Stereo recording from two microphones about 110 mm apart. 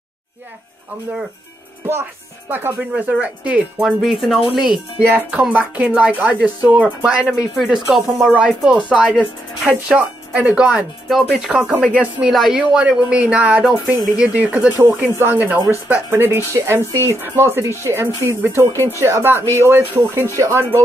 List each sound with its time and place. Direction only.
2.5 s speech: 15° right (ahead or behind)
3.8 s speech: centre (ahead or behind)
11.1 s speech: centre (ahead or behind); by 20.8 s 25° right (ahead or behind)